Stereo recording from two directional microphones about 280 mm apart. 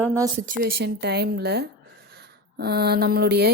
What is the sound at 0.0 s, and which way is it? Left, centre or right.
Speech, centre.